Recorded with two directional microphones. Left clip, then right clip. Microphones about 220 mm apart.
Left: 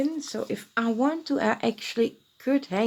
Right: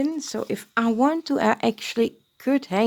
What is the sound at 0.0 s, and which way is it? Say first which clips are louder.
Speech: right 2 dB; 50° right (ahead or behind).